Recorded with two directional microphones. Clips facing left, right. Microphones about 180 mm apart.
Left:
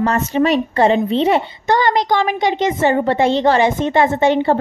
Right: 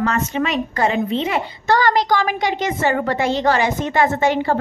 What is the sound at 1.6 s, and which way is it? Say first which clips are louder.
A woman's voice: right 2 dB; 20° left (ahead or behind).